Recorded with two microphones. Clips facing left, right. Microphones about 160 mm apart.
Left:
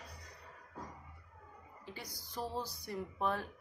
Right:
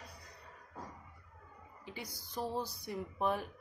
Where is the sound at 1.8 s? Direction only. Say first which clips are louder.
Right 2 dB; 15° right (ahead or behind).